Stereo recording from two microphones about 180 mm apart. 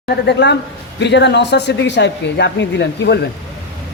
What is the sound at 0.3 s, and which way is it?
A woman's voice, 75° left (ahead or behind).